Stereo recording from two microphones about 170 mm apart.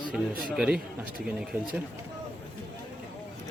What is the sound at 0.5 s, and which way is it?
Speech, centre (ahead or behind).